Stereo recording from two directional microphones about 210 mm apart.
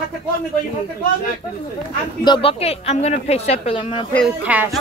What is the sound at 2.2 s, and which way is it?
Speech, 25° left (ahead or behind).